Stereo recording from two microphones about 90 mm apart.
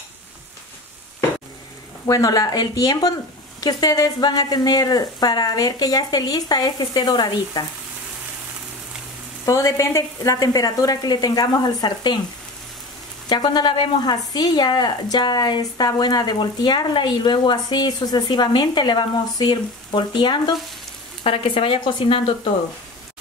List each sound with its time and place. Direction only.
2.0 s a woman's voice: 45° left (ahead or behind)
9.5 s a woman's voice: 35° left (ahead or behind); by 12.2 s 55° left (ahead or behind)
13.3 s a woman's voice: 55° left (ahead or behind)
21.2 s speech: 80° left